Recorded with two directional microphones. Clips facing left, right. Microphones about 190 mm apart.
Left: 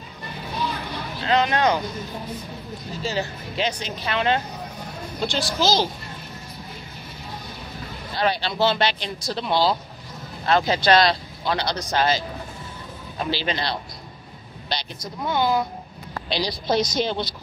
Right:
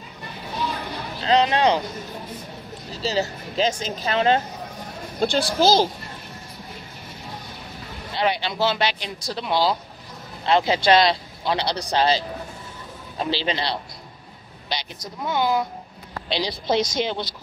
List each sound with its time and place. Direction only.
1.2 s speech: 30° right (ahead or behind)
2.9 s speech: 35° right (ahead or behind)
5.2 s a woman's voice: 55° right (ahead or behind)
8.1 s speech: 20° right (ahead or behind)
8.5 s speech: 5° right (ahead or behind)
10.4 s speech: 25° right (ahead or behind)
13.2 s speech: 30° right (ahead or behind)
15.2 s speech: 10° right (ahead or behind)
16.3 s a woman's voice: 25° right (ahead or behind)